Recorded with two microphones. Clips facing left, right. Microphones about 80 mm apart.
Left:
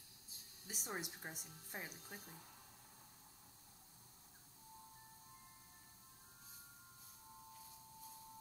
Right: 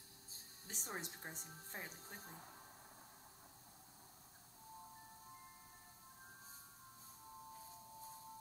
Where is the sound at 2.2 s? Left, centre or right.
Right.